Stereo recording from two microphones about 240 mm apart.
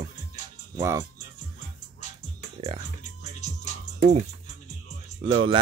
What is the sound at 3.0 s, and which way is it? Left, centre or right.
Music, left.